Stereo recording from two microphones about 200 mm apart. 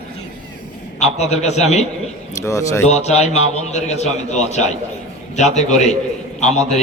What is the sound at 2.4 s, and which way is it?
Speech, 15° left (ahead or behind).